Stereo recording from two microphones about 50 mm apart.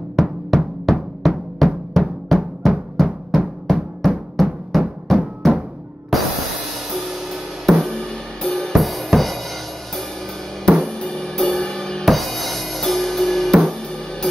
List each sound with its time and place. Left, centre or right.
0.1 s drum: centre
6.1 s music: centre
8.4 s drum kit: centre
10.9 s drum kit: centre